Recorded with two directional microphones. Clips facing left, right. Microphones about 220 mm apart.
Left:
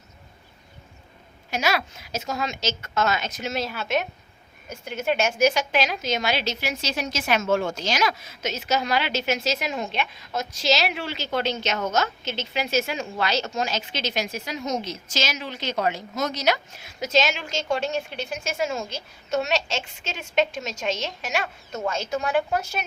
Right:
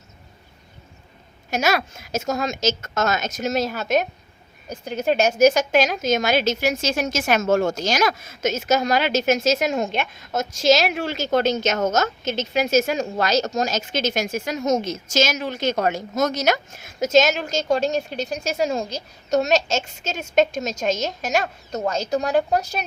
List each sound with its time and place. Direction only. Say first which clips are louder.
1.5 s a woman's voice: right 4 dB; 45° right (ahead or behind)